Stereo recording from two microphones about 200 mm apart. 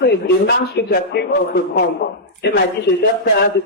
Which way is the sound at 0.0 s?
55° left (ahead or behind).